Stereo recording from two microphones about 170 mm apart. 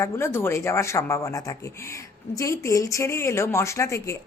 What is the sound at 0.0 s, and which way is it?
Speech, 15° left (ahead or behind).